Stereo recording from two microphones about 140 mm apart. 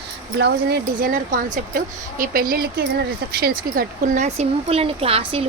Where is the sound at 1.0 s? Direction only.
75° right (ahead or behind).